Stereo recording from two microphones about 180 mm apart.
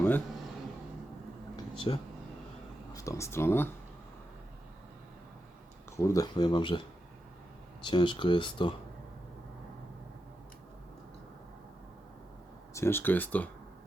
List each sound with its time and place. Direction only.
1.5 s a sound: 30° left (ahead or behind)
2.9 s speech: 15° left (ahead or behind)
6.0 s speech: 15° left (ahead or behind)
7.9 s speech: 25° left (ahead or behind)
12.7 s speech: 15° left (ahead or behind)